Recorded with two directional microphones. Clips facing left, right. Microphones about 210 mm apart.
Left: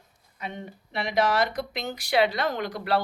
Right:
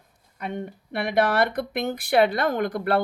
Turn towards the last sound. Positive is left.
turn(degrees=-55)  # may be behind; listen again after turning